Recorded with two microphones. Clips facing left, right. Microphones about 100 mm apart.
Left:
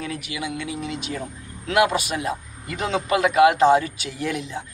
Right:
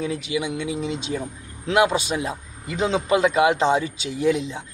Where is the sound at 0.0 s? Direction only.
25° right (ahead or behind).